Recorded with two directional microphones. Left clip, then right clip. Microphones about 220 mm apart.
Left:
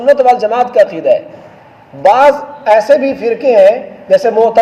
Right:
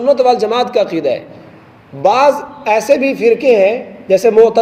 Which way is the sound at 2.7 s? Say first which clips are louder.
Left 2 dB; 35° right (ahead or behind).